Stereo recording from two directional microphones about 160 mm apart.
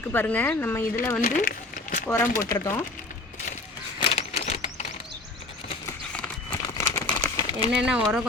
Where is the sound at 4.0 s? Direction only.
40° left (ahead or behind).